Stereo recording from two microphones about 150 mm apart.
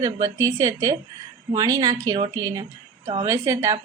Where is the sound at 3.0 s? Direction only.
40° right (ahead or behind).